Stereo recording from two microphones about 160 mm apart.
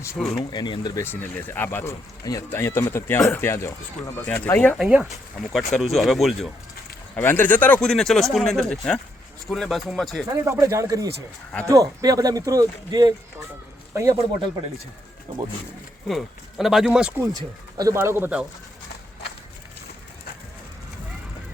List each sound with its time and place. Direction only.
0.3 s speech: 25° left (ahead or behind)
1.0 s speech: 15° left (ahead or behind)
4.8 s speech: 5° right (ahead or behind)
7.2 s speech: 10° left (ahead or behind)
10.4 s speech: 20° right (ahead or behind)
16.0 s speech: centre (ahead or behind)
17.7 s speech: 20° right (ahead or behind)